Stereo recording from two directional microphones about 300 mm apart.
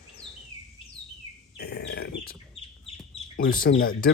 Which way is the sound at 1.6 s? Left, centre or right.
Left.